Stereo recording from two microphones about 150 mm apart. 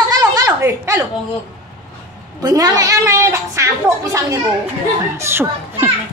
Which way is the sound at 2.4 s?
25° right (ahead or behind).